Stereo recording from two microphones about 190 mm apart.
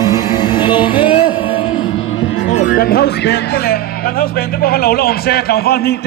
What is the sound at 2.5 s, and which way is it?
Music, 45° left (ahead or behind).